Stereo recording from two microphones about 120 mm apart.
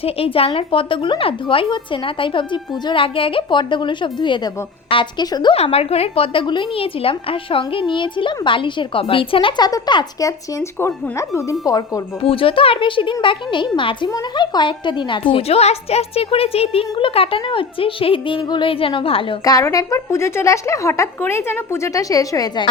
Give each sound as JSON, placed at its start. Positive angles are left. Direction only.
{"t": 0.0, "sound": "a woman's voice", "side_deg": 50}
{"t": 5.5, "sound": "a woman's voice", "side_deg": 55}
{"t": 12.2, "sound": "a woman's voice", "side_deg": 50}
{"t": 19.5, "sound": "a woman's voice", "side_deg": 30}